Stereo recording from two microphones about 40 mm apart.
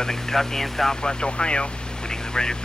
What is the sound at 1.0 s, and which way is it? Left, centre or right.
Speech, left.